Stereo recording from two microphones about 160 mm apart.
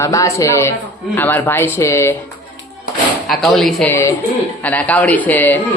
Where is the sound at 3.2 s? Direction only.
Centre (ahead or behind).